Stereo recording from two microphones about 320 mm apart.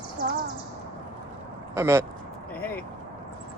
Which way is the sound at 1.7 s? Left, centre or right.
Centre.